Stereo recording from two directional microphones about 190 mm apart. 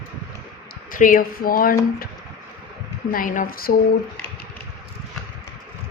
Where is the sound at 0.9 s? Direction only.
45° left (ahead or behind).